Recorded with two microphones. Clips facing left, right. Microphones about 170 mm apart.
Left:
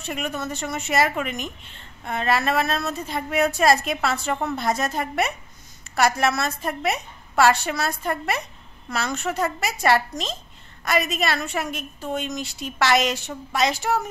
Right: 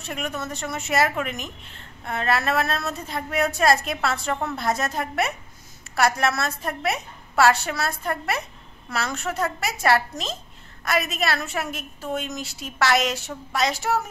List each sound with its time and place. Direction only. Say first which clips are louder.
0.0 s a woman's voice: left 2 dB; centre (ahead or behind)